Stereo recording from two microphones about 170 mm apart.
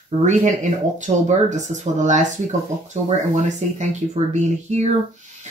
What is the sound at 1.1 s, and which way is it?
Speech, 50° right (ahead or behind).